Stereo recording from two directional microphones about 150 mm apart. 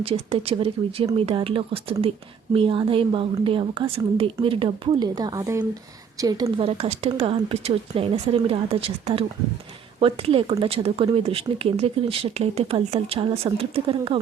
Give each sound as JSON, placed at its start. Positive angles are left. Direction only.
{"t": 0.0, "sound": "speech", "side_deg": -40}
{"t": 6.6, "sound": "speech", "side_deg": -40}